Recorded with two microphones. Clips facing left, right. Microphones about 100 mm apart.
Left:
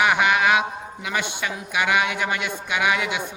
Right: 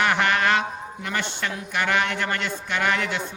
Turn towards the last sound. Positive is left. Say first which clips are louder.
# left 1 dB
turn(degrees=10)  # may be behind; listen again after turning